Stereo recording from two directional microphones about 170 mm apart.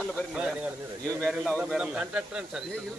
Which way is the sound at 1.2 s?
5° left (ahead or behind).